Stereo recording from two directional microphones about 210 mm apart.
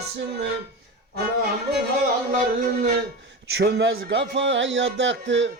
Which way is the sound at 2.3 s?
45° right (ahead or behind).